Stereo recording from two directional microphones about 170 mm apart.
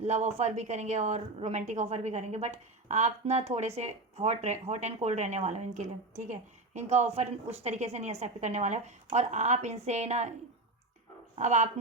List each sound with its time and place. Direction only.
0.0 s a woman's voice: 40° right (ahead or behind)
11.3 s speech: 45° right (ahead or behind)